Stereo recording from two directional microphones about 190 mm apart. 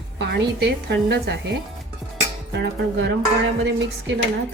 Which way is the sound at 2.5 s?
65° right (ahead or behind).